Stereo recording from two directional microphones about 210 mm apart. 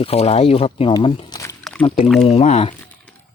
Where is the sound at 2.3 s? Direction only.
30° left (ahead or behind).